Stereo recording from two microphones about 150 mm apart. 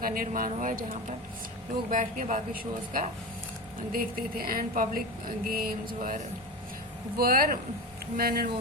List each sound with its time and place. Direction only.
0.0 s a woman's voice: 70° right (ahead or behind)
5.5 s a sound: 80° right; by 6.2 s 65° right (ahead or behind)
7.2 s a woman's voice: 80° right
8.1 s speech: 90° right